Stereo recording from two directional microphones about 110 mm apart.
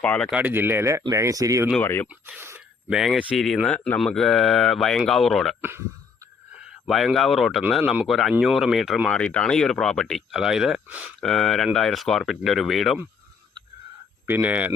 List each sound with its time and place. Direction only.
0.0 s speech: 10° left (ahead or behind)
0.3 s speech: 15° right (ahead or behind); by 1.6 s 30° right (ahead or behind)
1.8 s speech: 20° left (ahead or behind)
2.0 s speech: 15° right (ahead or behind)
2.9 s speech: centre (ahead or behind)
6.6 s speech: 5° right (ahead or behind)
9.0 s speech: 10° left (ahead or behind); by 11.1 s 15° right (ahead or behind)
11.2 s speech: 5° left (ahead or behind)
14.3 s speech: 15° right (ahead or behind)